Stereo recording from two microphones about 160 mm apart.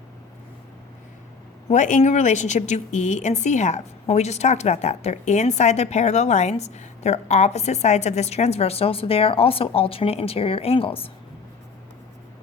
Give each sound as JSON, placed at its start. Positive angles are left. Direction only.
{"t": 1.6, "sound": "speech", "side_deg": 50}